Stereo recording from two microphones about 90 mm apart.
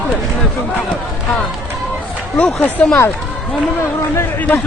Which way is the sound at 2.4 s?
20° left (ahead or behind).